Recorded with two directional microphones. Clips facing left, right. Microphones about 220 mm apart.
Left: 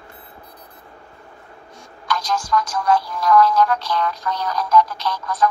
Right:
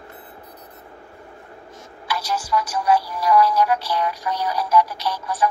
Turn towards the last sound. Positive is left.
turn(degrees=-10)  # may be behind; listen again after turning